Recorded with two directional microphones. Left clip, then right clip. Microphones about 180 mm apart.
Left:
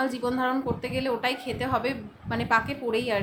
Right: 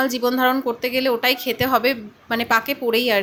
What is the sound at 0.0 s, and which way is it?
A woman's voice, 25° right (ahead or behind).